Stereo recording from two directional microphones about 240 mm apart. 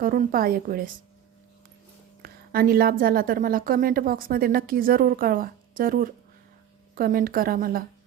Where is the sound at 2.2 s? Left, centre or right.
Right.